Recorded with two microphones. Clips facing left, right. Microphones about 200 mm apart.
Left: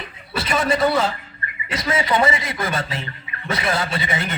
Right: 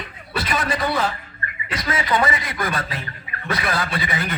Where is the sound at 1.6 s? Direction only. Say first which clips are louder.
Left 2 dB; 25° left (ahead or behind).